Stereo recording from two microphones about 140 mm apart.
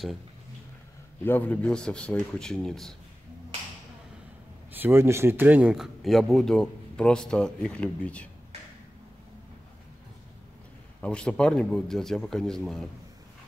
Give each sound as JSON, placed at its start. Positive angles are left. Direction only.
{"t": 1.2, "sound": "a man's voice", "side_deg": 15}
{"t": 4.7, "sound": "speech", "side_deg": -15}
{"t": 11.0, "sound": "speech", "side_deg": 10}